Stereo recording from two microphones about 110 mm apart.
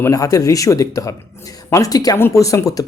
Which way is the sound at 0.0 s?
30° left (ahead or behind).